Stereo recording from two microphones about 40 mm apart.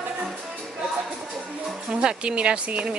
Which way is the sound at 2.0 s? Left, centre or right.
Right.